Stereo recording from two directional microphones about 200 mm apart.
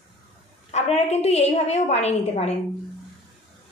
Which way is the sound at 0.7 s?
30° left (ahead or behind).